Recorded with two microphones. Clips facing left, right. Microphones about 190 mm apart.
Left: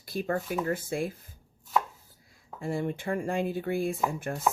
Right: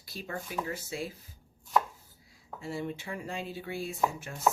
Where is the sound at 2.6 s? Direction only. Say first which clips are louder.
Left 5 dB; 50° left (ahead or behind).